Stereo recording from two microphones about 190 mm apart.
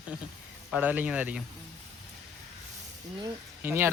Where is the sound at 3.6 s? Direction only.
10° right (ahead or behind).